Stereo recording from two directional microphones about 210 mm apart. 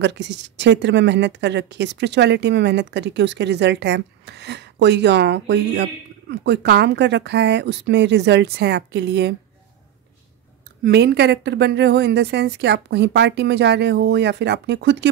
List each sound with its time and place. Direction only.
0.0 s speech: 55° right (ahead or behind)
10.8 s a woman's voice: 50° right (ahead or behind)